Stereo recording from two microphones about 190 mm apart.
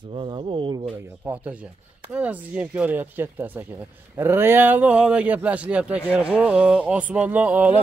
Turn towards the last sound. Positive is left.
turn(degrees=-5)  # may be behind; listen again after turning